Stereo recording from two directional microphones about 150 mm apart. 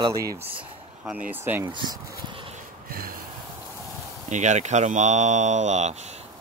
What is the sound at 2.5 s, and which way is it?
Snort, 75° right (ahead or behind).